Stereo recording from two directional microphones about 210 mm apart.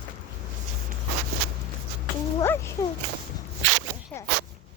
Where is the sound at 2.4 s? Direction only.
10° left (ahead or behind).